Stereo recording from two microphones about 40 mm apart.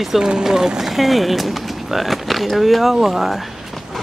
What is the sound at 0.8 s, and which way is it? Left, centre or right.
Speech, centre.